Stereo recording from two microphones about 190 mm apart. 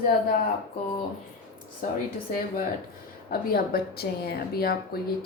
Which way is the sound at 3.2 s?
50° left (ahead or behind).